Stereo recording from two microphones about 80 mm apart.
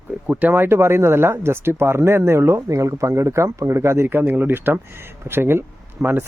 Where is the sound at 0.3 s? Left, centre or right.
Right.